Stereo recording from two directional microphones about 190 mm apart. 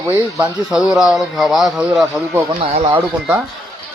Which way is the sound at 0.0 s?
15° right (ahead or behind).